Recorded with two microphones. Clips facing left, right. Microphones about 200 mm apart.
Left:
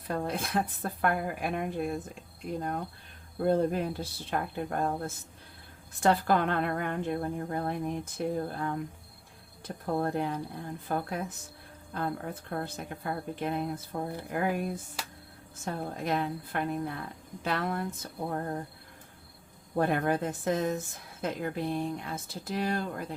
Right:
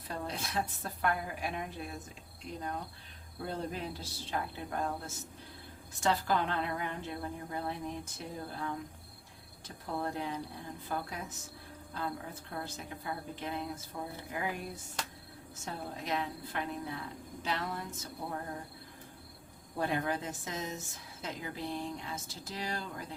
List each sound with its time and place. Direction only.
0.1 s a woman's voice: 55° left (ahead or behind)
19.7 s a woman's voice: 55° left (ahead or behind)